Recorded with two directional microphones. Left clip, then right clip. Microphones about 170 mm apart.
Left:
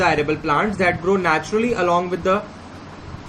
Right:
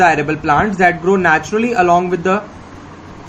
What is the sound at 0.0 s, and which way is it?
Speech, 55° right (ahead or behind).